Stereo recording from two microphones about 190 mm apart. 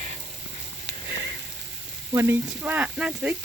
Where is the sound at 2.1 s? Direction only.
15° right (ahead or behind).